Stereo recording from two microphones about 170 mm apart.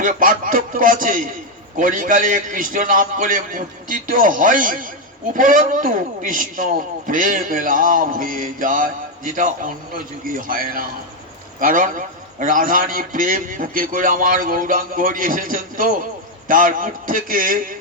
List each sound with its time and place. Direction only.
0.0 s a man's voice: 55° right (ahead or behind)